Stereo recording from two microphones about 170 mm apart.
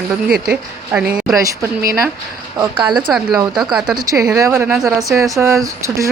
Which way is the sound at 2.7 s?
30° right (ahead or behind).